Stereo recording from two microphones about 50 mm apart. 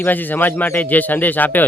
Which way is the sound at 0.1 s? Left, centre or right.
Left.